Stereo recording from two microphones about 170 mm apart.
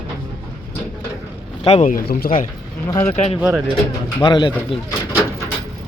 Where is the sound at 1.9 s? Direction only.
55° left (ahead or behind).